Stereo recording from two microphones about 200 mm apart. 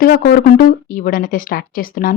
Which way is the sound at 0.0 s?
50° left (ahead or behind).